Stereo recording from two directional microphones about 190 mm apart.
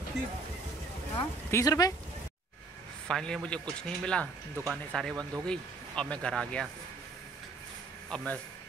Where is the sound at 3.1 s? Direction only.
5° left (ahead or behind).